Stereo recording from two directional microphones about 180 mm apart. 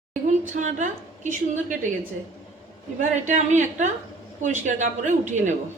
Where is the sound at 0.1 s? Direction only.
45° right (ahead or behind).